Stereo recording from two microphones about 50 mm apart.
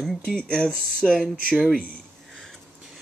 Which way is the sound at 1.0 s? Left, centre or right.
Centre.